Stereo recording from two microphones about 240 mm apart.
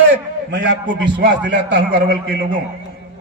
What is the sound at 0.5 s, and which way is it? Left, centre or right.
A man's voice, right.